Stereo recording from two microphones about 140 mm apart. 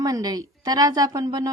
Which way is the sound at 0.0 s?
25° right (ahead or behind).